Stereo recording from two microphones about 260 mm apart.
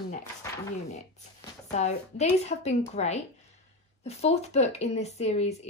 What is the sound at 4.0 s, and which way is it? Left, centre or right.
Speech, left.